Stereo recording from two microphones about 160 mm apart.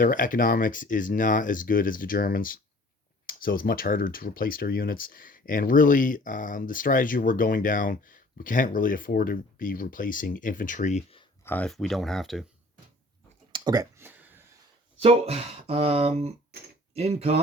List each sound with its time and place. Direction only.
0.0 s speech: 55° left (ahead or behind)
11.4 s speech: 10° left (ahead or behind)
13.5 s a sound: 25° right (ahead or behind)
14.9 s speech: 40° right (ahead or behind)